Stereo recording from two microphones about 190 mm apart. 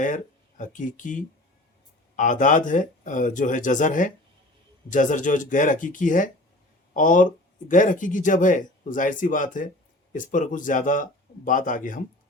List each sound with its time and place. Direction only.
0.0 s speech: 40° left (ahead or behind)